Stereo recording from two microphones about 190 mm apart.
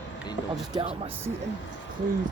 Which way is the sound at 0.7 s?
30° right (ahead or behind).